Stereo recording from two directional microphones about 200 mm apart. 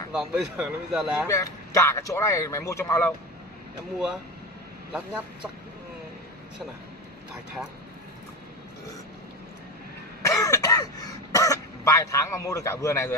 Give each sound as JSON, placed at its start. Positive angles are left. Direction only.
{"t": 0.1, "sound": "speech", "side_deg": -5}
{"t": 1.2, "sound": "a man's voice", "side_deg": 15}
{"t": 4.9, "sound": "speech", "side_deg": -5}
{"t": 10.2, "sound": "throat clearing", "side_deg": 15}